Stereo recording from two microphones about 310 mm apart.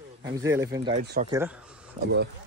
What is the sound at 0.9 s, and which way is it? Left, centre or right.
Speech, right.